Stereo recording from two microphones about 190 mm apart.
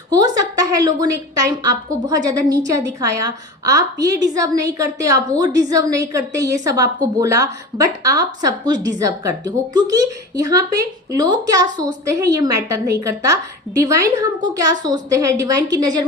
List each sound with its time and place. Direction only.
0.1 s a woman's voice: 20° right (ahead or behind)